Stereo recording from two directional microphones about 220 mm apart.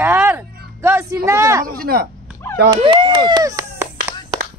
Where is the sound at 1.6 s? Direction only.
40° right (ahead or behind).